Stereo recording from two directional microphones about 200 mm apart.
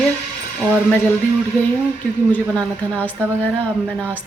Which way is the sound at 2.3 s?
5° left (ahead or behind).